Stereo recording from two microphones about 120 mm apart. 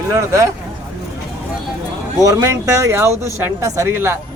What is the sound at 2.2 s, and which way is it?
Speech, 25° right (ahead or behind).